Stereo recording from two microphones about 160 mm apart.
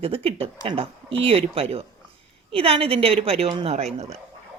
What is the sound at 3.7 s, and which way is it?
Speech, 40° right (ahead or behind).